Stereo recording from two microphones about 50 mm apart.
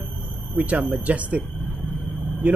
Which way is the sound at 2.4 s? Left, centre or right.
Right.